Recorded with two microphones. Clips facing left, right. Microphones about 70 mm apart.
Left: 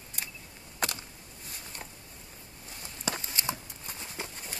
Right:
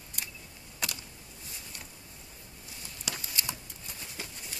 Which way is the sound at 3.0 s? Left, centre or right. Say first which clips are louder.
Left 4 dB; left.